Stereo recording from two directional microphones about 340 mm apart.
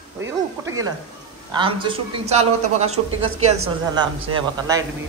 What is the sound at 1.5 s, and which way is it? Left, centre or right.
A man's voice, centre.